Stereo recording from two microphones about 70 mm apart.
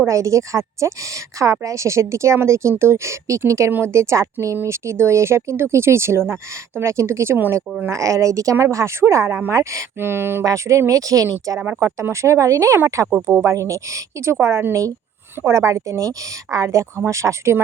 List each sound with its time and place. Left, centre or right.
0.0 s a woman's voice: right
3.7 s speech: right
3.9 s a woman's voice: right
7.9 s a woman's voice: right
10.4 s a woman's voice: right